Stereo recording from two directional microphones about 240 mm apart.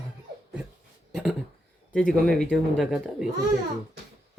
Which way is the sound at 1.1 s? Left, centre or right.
Centre.